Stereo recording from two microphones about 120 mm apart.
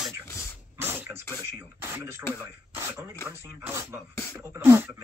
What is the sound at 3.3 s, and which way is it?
A man's voice, 20° right (ahead or behind).